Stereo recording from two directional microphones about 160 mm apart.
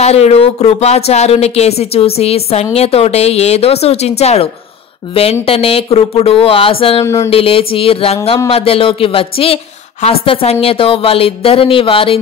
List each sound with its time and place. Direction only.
0.0 s speech: 40° left (ahead or behind)